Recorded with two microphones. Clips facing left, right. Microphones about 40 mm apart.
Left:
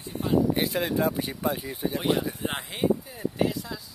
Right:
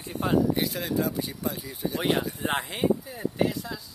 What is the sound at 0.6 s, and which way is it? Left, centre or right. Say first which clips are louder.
Speech: left 2 dB; left.